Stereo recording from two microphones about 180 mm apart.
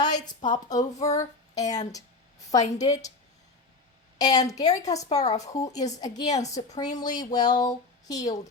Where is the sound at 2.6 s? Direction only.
40° left (ahead or behind).